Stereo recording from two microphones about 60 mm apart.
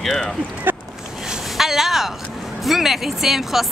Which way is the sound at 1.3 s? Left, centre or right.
Centre.